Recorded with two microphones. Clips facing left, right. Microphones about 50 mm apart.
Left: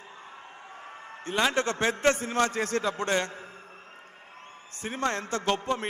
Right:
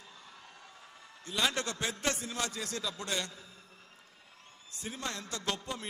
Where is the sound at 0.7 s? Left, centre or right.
Left.